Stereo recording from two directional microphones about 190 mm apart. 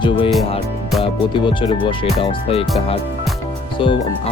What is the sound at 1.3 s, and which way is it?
Speech, 25° left (ahead or behind).